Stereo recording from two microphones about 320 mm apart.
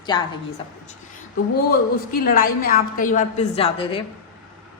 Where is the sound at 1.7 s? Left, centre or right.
Left.